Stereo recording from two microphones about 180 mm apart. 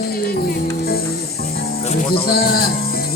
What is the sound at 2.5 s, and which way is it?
Music, 55° left (ahead or behind).